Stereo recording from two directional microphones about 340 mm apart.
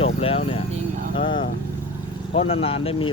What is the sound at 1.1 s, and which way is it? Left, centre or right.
Speech, centre.